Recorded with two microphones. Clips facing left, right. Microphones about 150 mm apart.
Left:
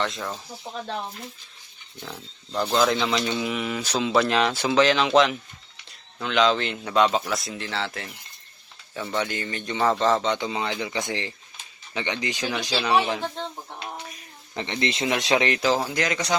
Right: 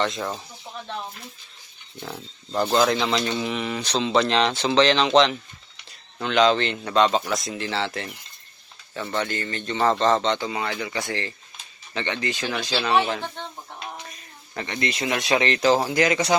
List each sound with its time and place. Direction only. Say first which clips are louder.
0.0 s speech: right 3 dB; centre (ahead or behind)
2.7 s speech: right 1 dB; centre (ahead or behind)
9.0 s speech: right 1 dB; 10° left (ahead or behind)
10.3 s speech: even; 20° left (ahead or behind)
14.5 s speech: left 1 dB; 25° left (ahead or behind)
15.6 s speech: right 4 dB; centre (ahead or behind)